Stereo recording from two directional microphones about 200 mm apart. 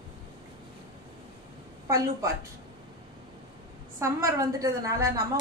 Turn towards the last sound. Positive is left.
turn(degrees=-15)  # may be behind; listen again after turning